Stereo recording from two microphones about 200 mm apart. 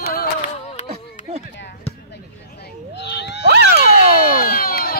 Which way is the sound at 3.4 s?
55° right (ahead or behind).